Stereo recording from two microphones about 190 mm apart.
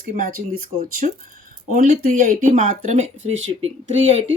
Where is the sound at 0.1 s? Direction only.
45° right (ahead or behind).